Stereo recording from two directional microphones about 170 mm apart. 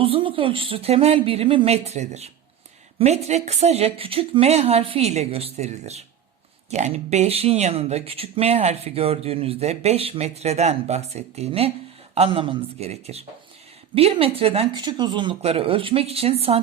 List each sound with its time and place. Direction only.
0.0 s speech: 30° right (ahead or behind)